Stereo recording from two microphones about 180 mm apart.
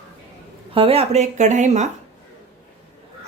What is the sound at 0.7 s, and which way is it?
Speech, 30° right (ahead or behind).